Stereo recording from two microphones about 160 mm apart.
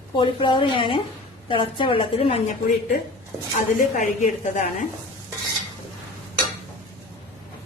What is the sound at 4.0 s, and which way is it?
Speech, 50° left (ahead or behind).